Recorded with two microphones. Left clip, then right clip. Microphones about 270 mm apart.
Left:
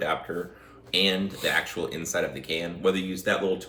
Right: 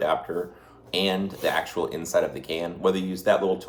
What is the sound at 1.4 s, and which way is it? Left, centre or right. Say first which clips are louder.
Speech: right 1 dB; centre.